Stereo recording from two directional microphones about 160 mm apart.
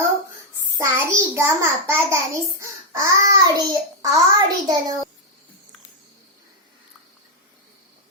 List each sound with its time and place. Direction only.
0.8 s a child's voice: 15° right (ahead or behind)